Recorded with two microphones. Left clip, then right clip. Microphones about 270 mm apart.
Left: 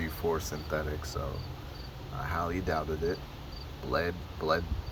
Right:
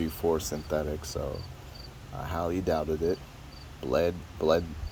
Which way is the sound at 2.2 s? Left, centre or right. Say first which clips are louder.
Right 3 dB; right.